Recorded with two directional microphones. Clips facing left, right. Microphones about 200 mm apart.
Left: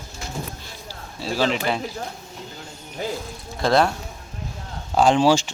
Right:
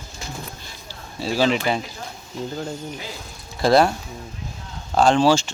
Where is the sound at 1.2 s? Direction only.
Centre (ahead or behind).